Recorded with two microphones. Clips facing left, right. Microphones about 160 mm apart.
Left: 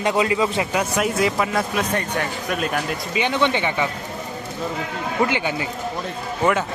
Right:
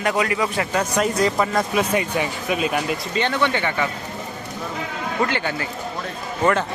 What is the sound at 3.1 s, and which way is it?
Speech, 15° left (ahead or behind).